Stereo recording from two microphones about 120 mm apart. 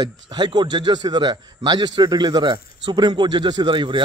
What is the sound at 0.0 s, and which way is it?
A man's voice, 40° right (ahead or behind).